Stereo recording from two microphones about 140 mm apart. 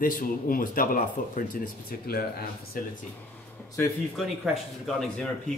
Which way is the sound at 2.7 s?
90° left.